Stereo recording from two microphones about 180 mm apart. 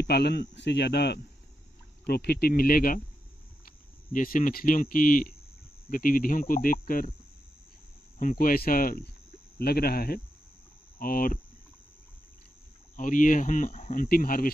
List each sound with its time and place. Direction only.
0.0 s speech: 65° left (ahead or behind)
4.1 s speech: 50° left (ahead or behind)
8.2 s speech: 45° left (ahead or behind)
12.9 s speech: 45° left (ahead or behind)